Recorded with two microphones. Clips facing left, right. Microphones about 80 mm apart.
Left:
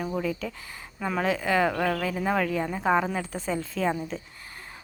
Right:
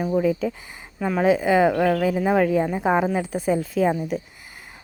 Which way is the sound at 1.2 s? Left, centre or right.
Centre.